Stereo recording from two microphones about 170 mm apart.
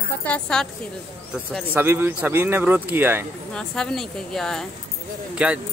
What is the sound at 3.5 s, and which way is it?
A woman's voice, 5° left (ahead or behind).